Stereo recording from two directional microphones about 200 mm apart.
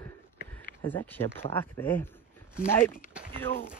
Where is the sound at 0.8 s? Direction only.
10° left (ahead or behind).